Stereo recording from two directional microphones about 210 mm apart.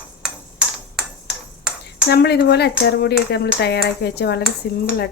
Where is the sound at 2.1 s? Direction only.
50° left (ahead or behind).